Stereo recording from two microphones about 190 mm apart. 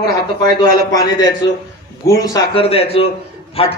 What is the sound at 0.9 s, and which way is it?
A man's voice, 20° left (ahead or behind).